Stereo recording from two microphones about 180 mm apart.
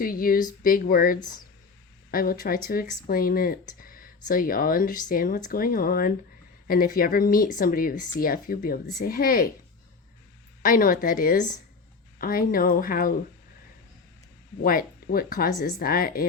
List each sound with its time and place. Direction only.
0.0 s speech: 50° left (ahead or behind)
10.6 s speech: 50° left (ahead or behind)
14.6 s speech: 50° left (ahead or behind)